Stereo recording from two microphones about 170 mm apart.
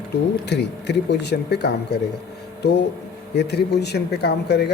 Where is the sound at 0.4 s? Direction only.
90° left.